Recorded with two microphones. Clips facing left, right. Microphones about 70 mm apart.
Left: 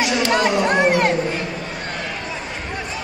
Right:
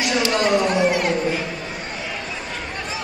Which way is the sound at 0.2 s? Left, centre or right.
Left.